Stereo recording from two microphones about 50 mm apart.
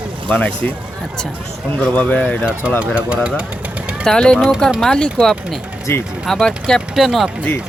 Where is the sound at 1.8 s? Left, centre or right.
Left.